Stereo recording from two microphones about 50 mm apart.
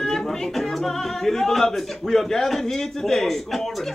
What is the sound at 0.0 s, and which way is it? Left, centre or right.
Speech, centre.